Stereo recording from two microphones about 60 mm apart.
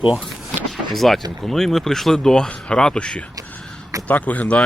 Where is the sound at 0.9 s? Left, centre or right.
Centre.